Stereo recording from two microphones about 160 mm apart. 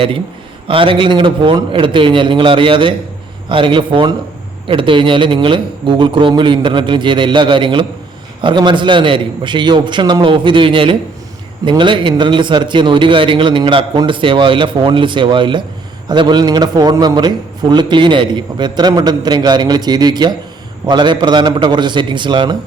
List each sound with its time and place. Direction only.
0.7 s a man's voice: 35° right (ahead or behind)